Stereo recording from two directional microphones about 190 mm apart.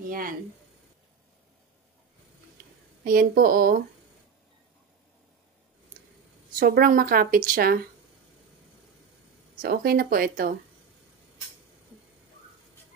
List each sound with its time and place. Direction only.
0.1 s speech: 50° right (ahead or behind)
2.6 s a sound: 55° right (ahead or behind)
3.0 s speech: 50° right (ahead or behind)
6.6 s speech: 50° right (ahead or behind)
9.6 s speech: 55° right (ahead or behind)